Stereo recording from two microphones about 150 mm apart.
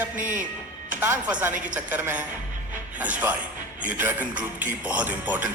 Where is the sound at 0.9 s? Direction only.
10° right (ahead or behind).